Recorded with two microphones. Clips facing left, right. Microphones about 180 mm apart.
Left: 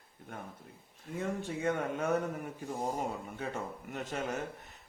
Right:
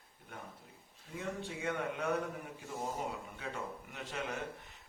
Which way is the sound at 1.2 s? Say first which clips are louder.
Left 5 dB; 45° left (ahead or behind).